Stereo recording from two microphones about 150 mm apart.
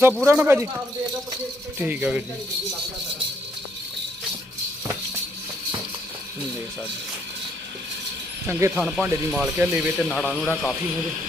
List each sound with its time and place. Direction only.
0.3 s a man's voice: 15° right (ahead or behind)
1.8 s a man's voice: 10° right (ahead or behind)
8.4 s a man's voice: 15° right (ahead or behind)
8.8 s speech: centre (ahead or behind)
10.1 s a man's voice: 5° left (ahead or behind)